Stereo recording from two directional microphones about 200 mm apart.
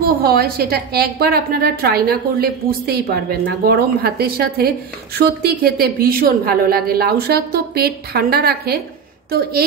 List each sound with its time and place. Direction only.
0.2 s a woman's voice: 50° right (ahead or behind)